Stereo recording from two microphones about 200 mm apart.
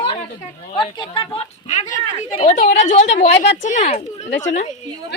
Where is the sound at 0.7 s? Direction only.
25° left (ahead or behind).